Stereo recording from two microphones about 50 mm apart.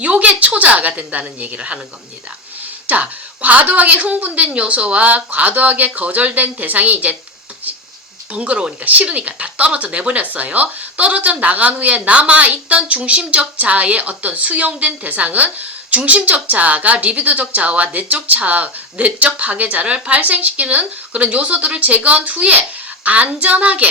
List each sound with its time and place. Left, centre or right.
0.0 s a woman's voice: right
2.8 s a woman's voice: right
8.3 s a woman's voice: right